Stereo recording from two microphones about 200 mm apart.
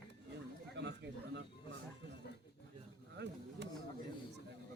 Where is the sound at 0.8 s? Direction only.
60° right (ahead or behind).